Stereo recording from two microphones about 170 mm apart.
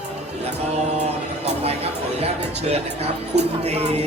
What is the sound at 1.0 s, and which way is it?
Music, 40° right (ahead or behind).